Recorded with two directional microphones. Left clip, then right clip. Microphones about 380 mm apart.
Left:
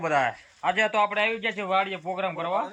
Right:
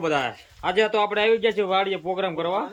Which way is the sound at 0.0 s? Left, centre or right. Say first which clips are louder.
Even; centre.